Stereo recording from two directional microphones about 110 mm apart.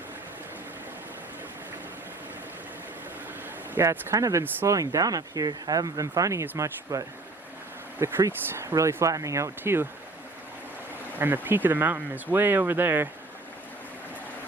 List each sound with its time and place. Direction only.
3.8 s speech: 25° right (ahead or behind)
11.2 s speech: 20° right (ahead or behind)